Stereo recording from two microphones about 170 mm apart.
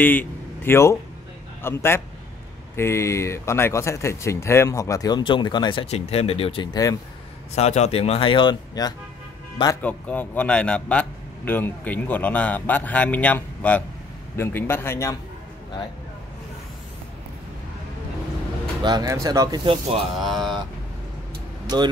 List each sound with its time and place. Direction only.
0.0 s a man's voice: 10° left (ahead or behind)
7.5 s speech: 40° left (ahead or behind); by 8.9 s 25° left (ahead or behind)
9.8 s a man's voice: 10° left (ahead or behind)
18.8 s speech: 25° right (ahead or behind)
20.2 s speech: centre (ahead or behind)